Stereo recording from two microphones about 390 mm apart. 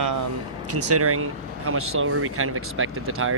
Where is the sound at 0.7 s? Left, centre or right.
Right.